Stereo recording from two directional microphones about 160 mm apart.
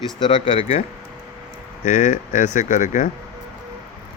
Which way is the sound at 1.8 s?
55° left (ahead or behind).